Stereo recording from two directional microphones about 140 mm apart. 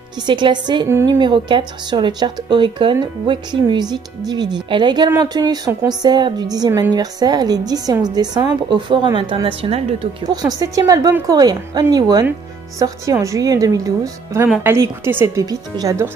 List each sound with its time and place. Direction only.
0.3 s speech: 35° right (ahead or behind)
0.8 s a woman's voice: 20° right (ahead or behind)
1.2 s a woman's voice: 35° right (ahead or behind)
10.2 s a woman's voice: 30° right (ahead or behind)